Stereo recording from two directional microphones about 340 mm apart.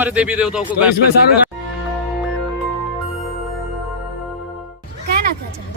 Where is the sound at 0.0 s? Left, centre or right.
Centre.